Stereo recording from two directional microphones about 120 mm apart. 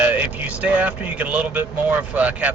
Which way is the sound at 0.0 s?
10° right (ahead or behind).